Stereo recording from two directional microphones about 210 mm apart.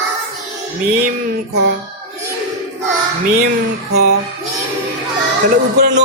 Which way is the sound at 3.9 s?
50° right (ahead or behind).